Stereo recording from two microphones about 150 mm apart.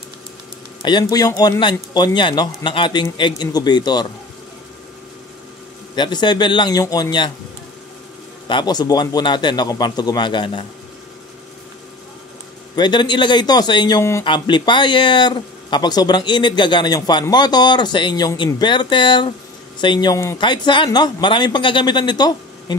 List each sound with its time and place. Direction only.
0.8 s a man's voice: 25° left (ahead or behind)
5.9 s a man's voice: 30° left (ahead or behind)
8.5 s a man's voice: 30° left (ahead or behind)
12.7 s a man's voice: 30° left (ahead or behind)